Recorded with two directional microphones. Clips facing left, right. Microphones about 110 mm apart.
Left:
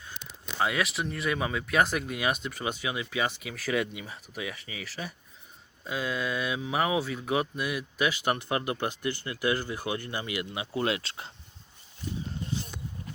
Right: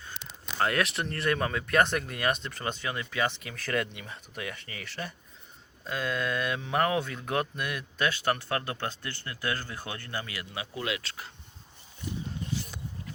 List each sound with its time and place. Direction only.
0.6 s speech: centre (ahead or behind); by 10.7 s 20° left (ahead or behind)
10.8 s speech: 30° left (ahead or behind)